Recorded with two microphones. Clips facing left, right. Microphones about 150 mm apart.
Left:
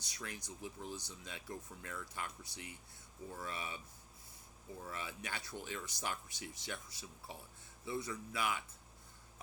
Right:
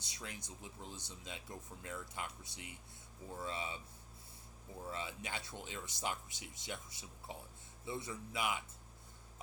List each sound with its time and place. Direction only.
0.0 s speech: 25° right (ahead or behind)
4.9 s speech: 25° right (ahead or behind)